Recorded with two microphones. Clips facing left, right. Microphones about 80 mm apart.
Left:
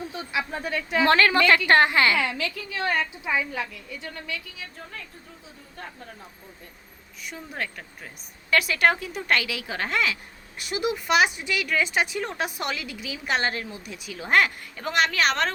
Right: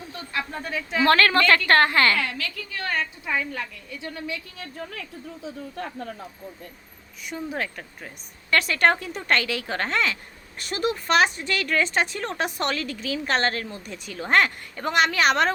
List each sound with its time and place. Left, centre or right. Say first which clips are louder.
0.1 s a sound: right 2 dB; centre
0.5 s speech: left 2 dB; centre
1.0 s speech: right 1 dB; centre
4.5 s a woman's voice: right 5 dB; right
5.7 s speech: right 3 dB; right
7.3 s speech: right 4 dB; centre